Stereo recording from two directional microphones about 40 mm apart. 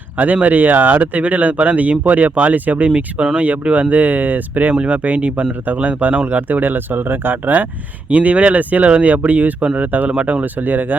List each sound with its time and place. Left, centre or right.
0.4 s speech: right
4.7 s speech: right
8.1 s speech: right
10.1 s speech: right
10.4 s speech: right